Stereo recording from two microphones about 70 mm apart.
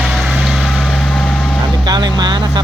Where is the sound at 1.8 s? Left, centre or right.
Right.